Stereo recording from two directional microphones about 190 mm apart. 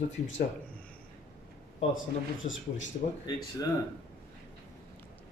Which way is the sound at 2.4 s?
90° left.